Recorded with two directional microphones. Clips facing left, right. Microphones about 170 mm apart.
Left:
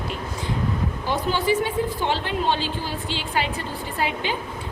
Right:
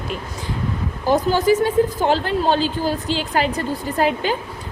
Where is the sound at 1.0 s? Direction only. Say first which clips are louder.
Right 7 dB; 40° right (ahead or behind).